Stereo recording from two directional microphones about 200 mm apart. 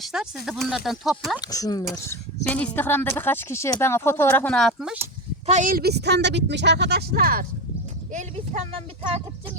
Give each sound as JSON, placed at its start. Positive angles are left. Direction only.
{"t": 0.0, "sound": "speech", "side_deg": 0}
{"t": 1.4, "sound": "speech", "side_deg": 20}
{"t": 5.5, "sound": "speech", "side_deg": -40}
{"t": 8.1, "sound": "speech", "side_deg": -35}